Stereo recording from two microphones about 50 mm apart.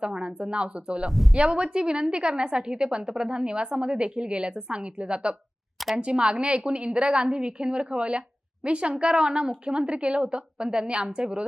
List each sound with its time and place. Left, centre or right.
0.0 s a woman's voice: centre
1.1 s speech: centre
1.5 s a woman's voice: centre